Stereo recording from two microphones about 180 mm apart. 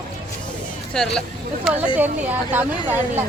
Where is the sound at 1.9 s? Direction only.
10° right (ahead or behind).